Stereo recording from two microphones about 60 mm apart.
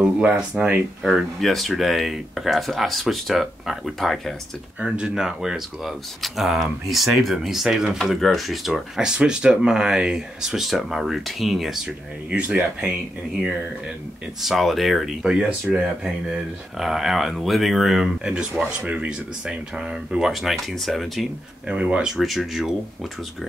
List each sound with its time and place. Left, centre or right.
0.0 s speech: centre
1.0 s speech: centre
4.9 s speech: centre
14.4 s speech: centre
15.2 s speech: centre
18.2 s speech: centre
21.6 s speech: centre
22.1 s speech: centre